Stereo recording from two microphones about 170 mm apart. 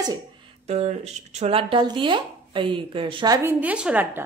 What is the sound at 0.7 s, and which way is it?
Speech, 40° right (ahead or behind).